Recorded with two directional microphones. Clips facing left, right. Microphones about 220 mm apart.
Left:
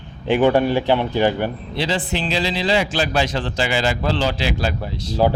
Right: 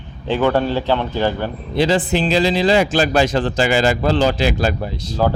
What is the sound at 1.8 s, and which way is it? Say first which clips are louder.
Speech: right 7 dB; 45° right (ahead or behind).